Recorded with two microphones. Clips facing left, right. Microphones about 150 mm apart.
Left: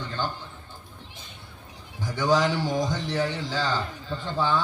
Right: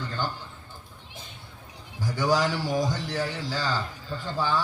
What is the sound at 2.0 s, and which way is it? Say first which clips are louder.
A man's voice: left 1 dB; 20° left (ahead or behind).